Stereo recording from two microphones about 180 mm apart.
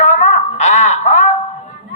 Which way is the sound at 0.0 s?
40° left (ahead or behind).